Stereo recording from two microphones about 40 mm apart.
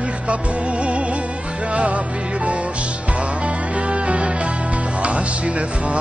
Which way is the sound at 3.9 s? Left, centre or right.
Right.